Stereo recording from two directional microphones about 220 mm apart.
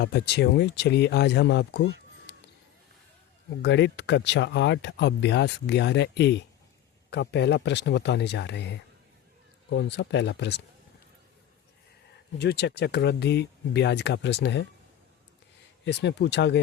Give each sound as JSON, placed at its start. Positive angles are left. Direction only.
{"t": 0.0, "sound": "speech", "side_deg": 50}
{"t": 3.6, "sound": "speech", "side_deg": 55}
{"t": 12.4, "sound": "speech", "side_deg": 50}
{"t": 15.8, "sound": "speech", "side_deg": 50}